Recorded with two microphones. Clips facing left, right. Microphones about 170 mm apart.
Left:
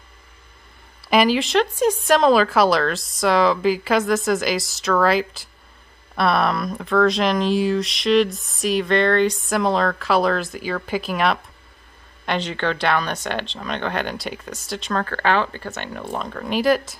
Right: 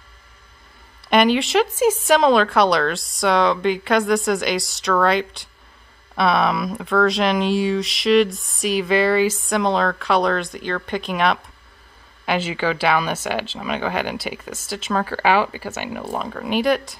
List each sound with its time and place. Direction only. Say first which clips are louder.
1.1 s speech: right 1 dB; centre (ahead or behind)